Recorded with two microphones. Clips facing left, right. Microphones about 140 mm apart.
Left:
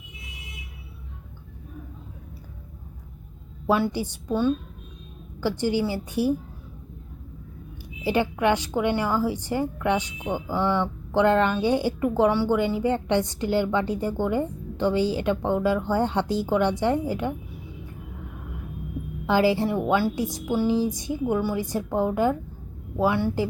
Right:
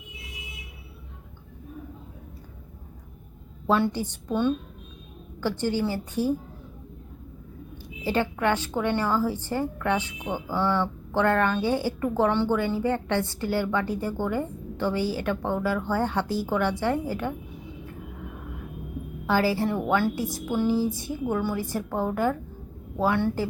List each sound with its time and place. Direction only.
3.7 s a woman's voice: 10° left (ahead or behind)
8.0 s a woman's voice: 15° left (ahead or behind)
19.2 s a woman's voice: 20° left (ahead or behind)